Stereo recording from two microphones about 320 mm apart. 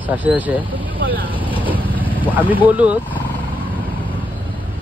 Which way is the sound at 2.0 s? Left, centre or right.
Centre.